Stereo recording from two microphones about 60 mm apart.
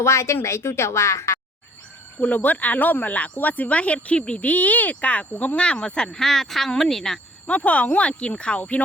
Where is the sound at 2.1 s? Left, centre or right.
Left; by 7.2 s centre.